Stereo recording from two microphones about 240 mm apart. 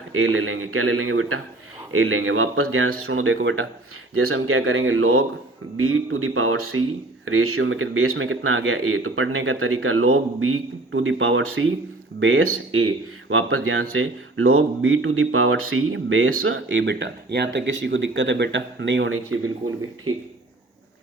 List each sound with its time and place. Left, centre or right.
0.1 s speech: right